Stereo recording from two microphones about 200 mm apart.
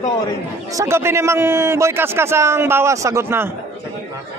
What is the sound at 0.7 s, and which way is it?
Speech, 15° right (ahead or behind).